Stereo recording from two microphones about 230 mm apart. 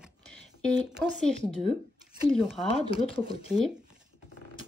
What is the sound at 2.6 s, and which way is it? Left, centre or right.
Speech, left.